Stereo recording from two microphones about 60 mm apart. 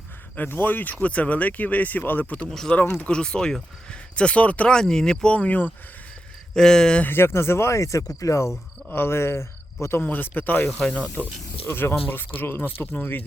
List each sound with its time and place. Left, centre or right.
0.3 s speech: left
2.5 s speech: centre; by 4.7 s left
4.7 s speech: centre
5.3 s speech: left
6.5 s speech: centre
7.0 s speech: left
8.9 s speech: left
10.0 s speech: left
10.7 s speech: centre
11.1 s speech: left
11.7 s speech: left